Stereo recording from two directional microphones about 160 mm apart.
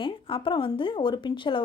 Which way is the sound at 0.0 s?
30° left (ahead or behind).